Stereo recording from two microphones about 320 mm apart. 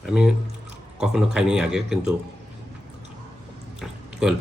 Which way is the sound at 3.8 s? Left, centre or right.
Centre.